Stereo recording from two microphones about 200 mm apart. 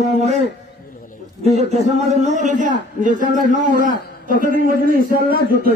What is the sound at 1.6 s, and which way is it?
A man's voice, 35° right (ahead or behind).